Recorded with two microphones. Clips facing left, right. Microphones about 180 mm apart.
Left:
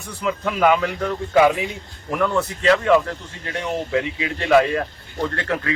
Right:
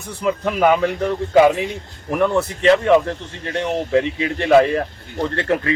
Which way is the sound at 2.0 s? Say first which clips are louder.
Right 3 dB; 20° right (ahead or behind).